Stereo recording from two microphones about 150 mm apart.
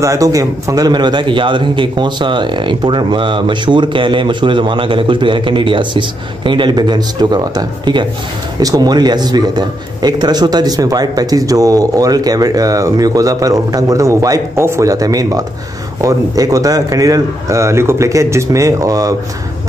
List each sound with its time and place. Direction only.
0.0 s a man's voice: 20° right (ahead or behind)